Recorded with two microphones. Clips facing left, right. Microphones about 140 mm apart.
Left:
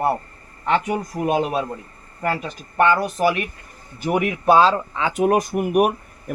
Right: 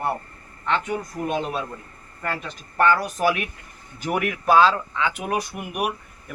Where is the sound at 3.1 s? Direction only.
Centre (ahead or behind).